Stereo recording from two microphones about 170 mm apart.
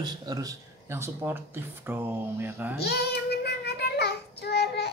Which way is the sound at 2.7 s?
70° left (ahead or behind).